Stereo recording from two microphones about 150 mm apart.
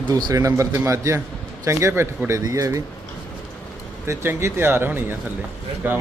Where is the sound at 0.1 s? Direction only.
25° right (ahead or behind).